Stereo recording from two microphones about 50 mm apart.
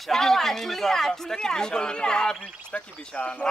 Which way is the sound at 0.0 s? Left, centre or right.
Centre.